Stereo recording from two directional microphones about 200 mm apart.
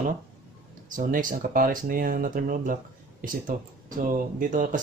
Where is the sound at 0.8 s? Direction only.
40° right (ahead or behind).